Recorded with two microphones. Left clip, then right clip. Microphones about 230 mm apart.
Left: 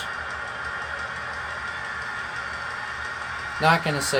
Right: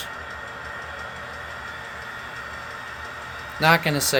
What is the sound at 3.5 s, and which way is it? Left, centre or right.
Speech, right.